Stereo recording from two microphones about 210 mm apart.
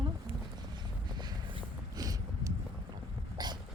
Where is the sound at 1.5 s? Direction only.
20° right (ahead or behind).